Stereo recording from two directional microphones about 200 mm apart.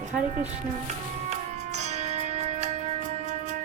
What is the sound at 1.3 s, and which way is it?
Music, 35° right (ahead or behind).